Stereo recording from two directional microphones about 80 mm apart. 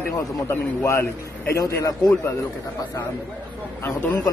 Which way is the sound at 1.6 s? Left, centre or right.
Left.